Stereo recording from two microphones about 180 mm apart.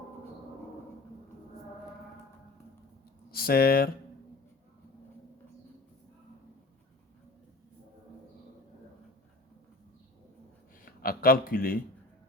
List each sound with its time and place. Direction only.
3.3 s speech: 55° left (ahead or behind)
10.8 s speech: 55° left (ahead or behind)